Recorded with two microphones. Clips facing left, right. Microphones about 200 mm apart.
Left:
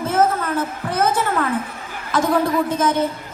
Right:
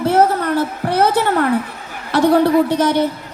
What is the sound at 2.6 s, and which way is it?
Speech, 70° right (ahead or behind).